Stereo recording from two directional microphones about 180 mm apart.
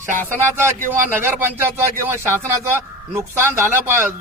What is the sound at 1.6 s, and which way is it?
A man's voice, 15° right (ahead or behind).